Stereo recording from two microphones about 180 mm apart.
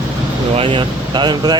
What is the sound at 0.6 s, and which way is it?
Speech, 30° right (ahead or behind).